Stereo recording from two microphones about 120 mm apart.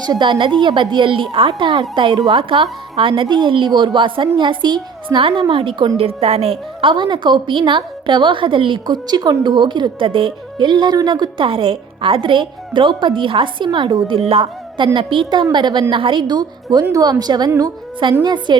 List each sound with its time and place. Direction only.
0.0 s a woman's voice: 35° right (ahead or behind)
2.4 s a woman's voice: 50° right (ahead or behind)
14.2 s a woman's voice: 50° right (ahead or behind); by 18.5 s 35° right (ahead or behind)